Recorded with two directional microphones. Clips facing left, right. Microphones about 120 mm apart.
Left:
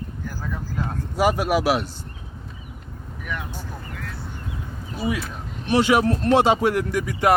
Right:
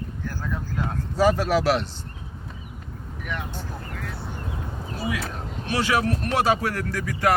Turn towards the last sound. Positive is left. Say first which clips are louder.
# left 3 dB
turn(degrees=20)  # may be behind; listen again after turning